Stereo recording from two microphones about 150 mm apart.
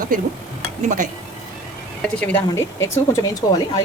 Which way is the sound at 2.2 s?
15° left (ahead or behind).